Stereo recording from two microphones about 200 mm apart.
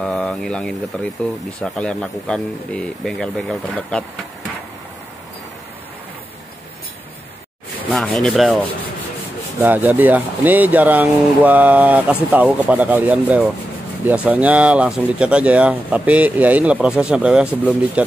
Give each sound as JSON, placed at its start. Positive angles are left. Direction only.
{"t": 0.0, "sound": "speech", "side_deg": 0}
{"t": 7.9, "sound": "speech", "side_deg": 0}